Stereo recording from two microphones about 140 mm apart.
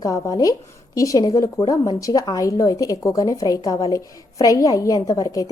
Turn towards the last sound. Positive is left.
turn(degrees=25)  # may be behind; listen again after turning